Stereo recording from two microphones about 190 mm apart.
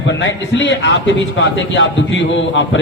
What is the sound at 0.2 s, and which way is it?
A man's voice, 70° left (ahead or behind).